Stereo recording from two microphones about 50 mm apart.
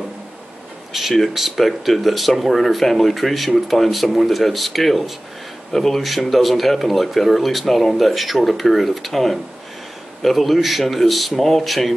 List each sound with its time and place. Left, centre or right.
0.9 s speech: centre